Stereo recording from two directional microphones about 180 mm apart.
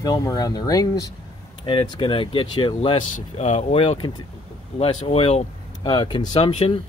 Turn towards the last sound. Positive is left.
turn(degrees=30)  # may be behind; listen again after turning